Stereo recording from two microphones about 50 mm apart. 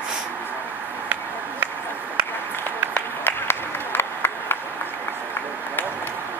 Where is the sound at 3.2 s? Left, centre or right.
Left.